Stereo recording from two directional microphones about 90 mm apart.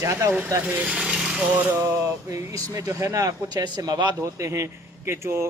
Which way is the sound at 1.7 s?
35° right (ahead or behind).